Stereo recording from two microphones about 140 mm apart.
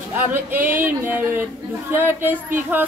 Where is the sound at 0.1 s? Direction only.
15° right (ahead or behind).